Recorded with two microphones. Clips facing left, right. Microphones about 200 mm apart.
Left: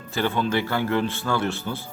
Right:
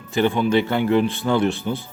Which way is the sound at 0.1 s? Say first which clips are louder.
Right 5 dB; 15° right (ahead or behind).